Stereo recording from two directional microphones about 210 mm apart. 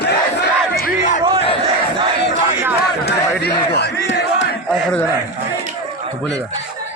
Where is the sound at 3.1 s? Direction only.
50° left (ahead or behind).